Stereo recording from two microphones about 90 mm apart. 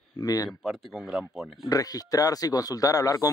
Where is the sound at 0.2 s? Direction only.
40° left (ahead or behind).